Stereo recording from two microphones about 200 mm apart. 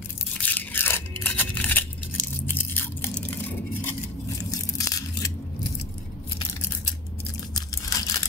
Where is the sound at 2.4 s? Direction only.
10° left (ahead or behind).